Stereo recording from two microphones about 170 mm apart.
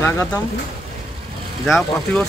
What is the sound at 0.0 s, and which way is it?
Speech, 15° left (ahead or behind).